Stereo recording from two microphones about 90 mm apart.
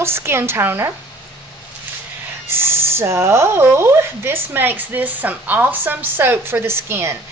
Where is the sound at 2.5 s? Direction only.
25° right (ahead or behind).